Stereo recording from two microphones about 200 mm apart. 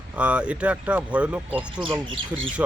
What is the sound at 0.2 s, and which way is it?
Speech, 5° right (ahead or behind).